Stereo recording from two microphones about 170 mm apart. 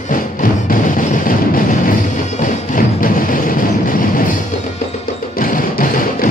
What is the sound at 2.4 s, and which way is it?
Music, 55° left (ahead or behind).